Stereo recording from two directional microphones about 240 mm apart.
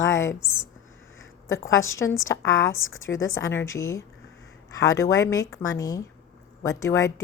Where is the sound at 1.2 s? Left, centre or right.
Left.